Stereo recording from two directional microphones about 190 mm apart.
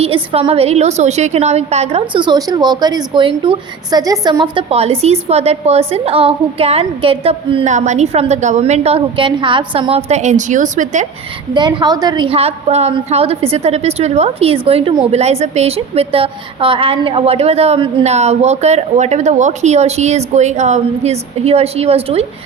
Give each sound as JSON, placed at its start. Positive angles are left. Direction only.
{"t": 0.0, "sound": "a woman's voice", "side_deg": -30}
{"t": 11.5, "sound": "a woman's voice", "side_deg": -25}